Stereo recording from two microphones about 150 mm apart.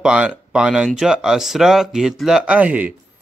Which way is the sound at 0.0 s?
5° right (ahead or behind).